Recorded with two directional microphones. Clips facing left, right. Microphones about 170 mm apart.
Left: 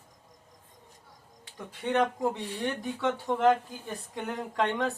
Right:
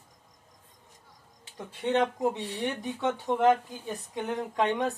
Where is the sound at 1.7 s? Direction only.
20° right (ahead or behind).